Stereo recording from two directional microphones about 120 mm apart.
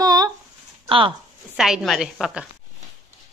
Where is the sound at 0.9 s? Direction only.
45° right (ahead or behind).